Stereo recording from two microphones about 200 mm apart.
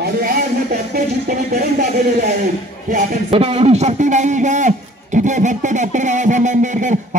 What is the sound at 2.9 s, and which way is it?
A man's voice, 30° right (ahead or behind).